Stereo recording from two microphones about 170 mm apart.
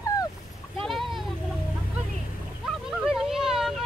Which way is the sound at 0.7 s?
Centre (ahead or behind).